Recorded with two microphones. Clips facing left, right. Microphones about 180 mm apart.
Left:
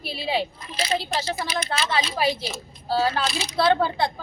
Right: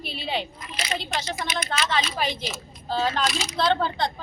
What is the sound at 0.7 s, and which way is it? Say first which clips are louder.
Speech: left 4 dB; 30° left (ahead or behind).